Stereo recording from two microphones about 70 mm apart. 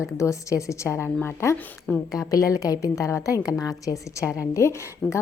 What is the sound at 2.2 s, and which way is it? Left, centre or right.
A woman's voice, left.